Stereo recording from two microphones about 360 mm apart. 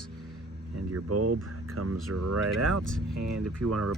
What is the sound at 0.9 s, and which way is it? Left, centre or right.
Speech, right.